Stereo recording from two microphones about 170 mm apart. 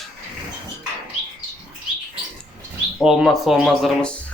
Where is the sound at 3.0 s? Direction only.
5° right (ahead or behind).